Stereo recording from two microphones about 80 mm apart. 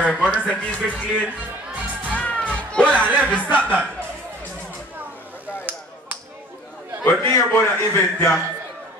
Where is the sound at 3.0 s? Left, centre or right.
Centre.